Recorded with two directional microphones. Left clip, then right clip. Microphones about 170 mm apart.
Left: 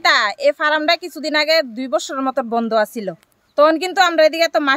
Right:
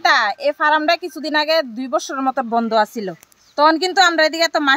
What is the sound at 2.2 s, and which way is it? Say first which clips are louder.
A woman's voice: right 1 dB; 25° left (ahead or behind).